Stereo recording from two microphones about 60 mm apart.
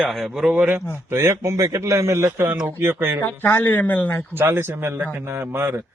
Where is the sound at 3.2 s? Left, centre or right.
Left.